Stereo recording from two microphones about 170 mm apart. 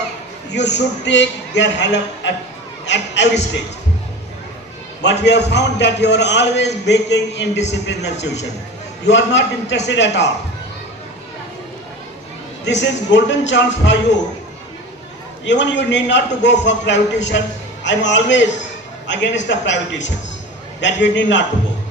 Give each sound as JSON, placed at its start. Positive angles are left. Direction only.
{"t": 0.5, "sound": "a man's voice", "side_deg": 90}
{"t": 5.0, "sound": "a man's voice", "side_deg": 90}
{"t": 12.6, "sound": "a man's voice", "side_deg": 90}
{"t": 15.4, "sound": "a man's voice", "side_deg": 90}